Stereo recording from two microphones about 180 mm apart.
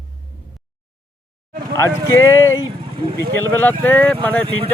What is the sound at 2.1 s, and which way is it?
Speech, 15° left (ahead or behind).